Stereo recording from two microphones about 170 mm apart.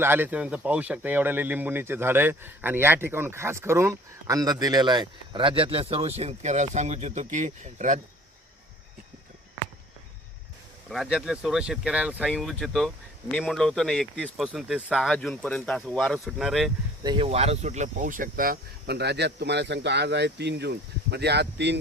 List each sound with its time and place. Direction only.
0.0 s speech: 10° right (ahead or behind); by 8.0 s 45° right (ahead or behind)
10.8 s speech: centre (ahead or behind)
17.0 s speech: 30° right (ahead or behind); by 21.8 s 85° right